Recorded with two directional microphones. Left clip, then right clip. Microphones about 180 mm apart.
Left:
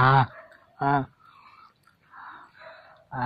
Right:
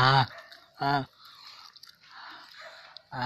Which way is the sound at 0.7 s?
20° right (ahead or behind).